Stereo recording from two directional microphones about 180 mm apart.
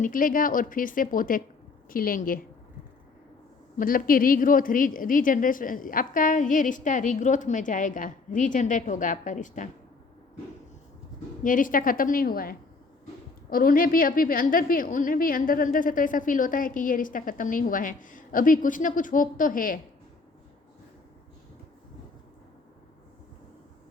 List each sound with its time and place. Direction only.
0.0 s a woman's voice: 50° left (ahead or behind)
3.8 s a woman's voice: 50° left (ahead or behind)
11.4 s a woman's voice: 50° left (ahead or behind)